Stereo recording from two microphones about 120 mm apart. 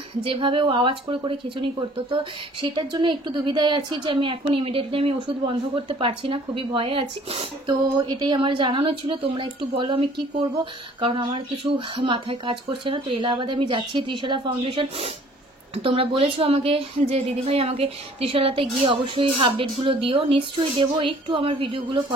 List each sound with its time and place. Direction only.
0.2 s a woman's voice: 50° right (ahead or behind)
7.6 s a woman's voice: 40° right (ahead or behind)